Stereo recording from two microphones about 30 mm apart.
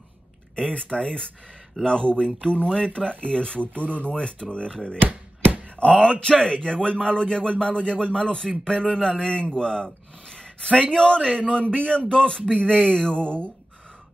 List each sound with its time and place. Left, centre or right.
0.7 s a man's voice: left
3.7 s speech: right
4.1 s speech: left
5.0 s chop: right
5.8 s a man's voice: left
8.8 s speech: centre
9.2 s a man's voice: left